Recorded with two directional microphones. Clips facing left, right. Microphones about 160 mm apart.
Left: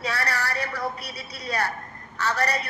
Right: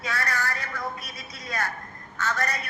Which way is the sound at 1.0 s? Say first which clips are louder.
Left 5 dB; 35° left (ahead or behind).